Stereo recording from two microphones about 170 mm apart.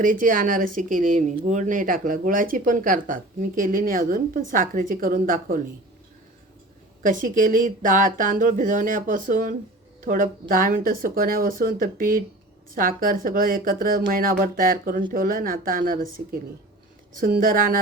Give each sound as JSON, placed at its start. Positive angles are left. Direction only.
{"t": 0.0, "sound": "speech", "side_deg": -50}
{"t": 7.0, "sound": "a woman's voice", "side_deg": -50}
{"t": 17.2, "sound": "speech", "side_deg": -55}